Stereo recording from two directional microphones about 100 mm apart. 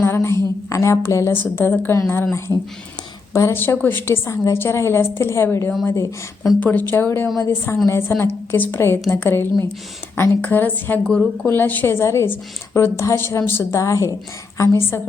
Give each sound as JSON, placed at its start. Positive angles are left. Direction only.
{"t": 0.0, "sound": "a woman's voice", "side_deg": 25}
{"t": 3.3, "sound": "a woman's voice", "side_deg": 25}
{"t": 6.6, "sound": "a woman's voice", "side_deg": 15}